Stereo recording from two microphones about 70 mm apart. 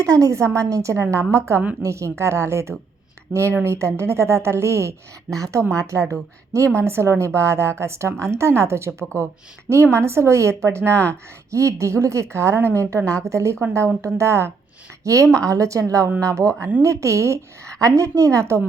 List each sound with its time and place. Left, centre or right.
0.0 s speech: right